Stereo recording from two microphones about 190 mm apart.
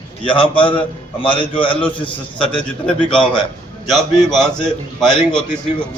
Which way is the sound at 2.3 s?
5° left (ahead or behind).